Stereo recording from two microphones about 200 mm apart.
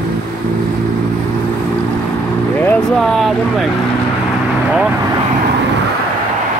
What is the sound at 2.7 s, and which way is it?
Vehicle, centre (ahead or behind).